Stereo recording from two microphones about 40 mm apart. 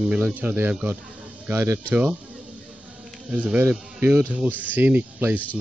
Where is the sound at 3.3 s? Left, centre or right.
Right.